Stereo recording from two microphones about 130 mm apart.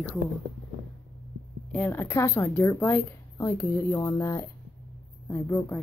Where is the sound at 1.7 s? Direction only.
15° left (ahead or behind).